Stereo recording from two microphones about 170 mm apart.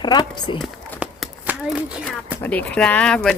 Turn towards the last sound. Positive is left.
turn(degrees=5)  # may be behind; listen again after turning